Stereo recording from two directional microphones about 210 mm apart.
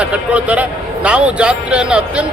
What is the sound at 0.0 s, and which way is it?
A man's voice, 5° right (ahead or behind).